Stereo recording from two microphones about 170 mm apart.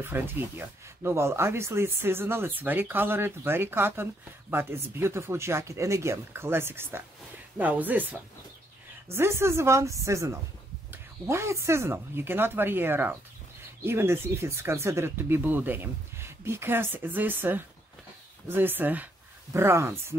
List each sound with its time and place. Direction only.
0.0 s speech: 15° right (ahead or behind)